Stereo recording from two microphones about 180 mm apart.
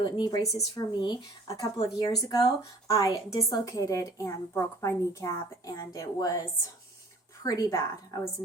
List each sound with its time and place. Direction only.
0.0 s a woman's voice: 25° left (ahead or behind)
7.4 s a woman's voice: 20° left (ahead or behind)